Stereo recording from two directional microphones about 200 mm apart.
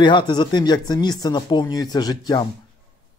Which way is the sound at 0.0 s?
20° left (ahead or behind).